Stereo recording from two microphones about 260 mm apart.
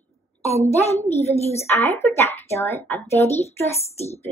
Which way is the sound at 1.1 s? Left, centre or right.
Centre.